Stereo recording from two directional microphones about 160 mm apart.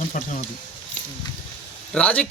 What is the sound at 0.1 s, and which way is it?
Speech, 50° left (ahead or behind).